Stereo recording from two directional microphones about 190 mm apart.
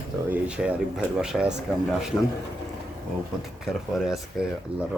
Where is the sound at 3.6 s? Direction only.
Centre (ahead or behind).